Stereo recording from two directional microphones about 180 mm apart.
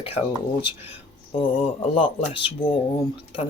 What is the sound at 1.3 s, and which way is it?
Speech, 30° left (ahead or behind).